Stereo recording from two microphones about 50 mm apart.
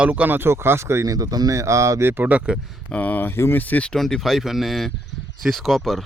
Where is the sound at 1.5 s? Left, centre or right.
Right.